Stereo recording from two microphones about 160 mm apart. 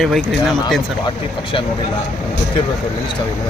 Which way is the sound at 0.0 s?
Centre (ahead or behind).